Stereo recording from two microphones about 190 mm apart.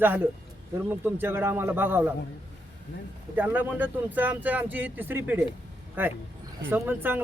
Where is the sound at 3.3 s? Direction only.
10° right (ahead or behind).